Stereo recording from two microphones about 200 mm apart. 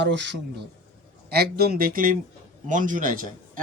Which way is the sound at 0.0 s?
60° right (ahead or behind).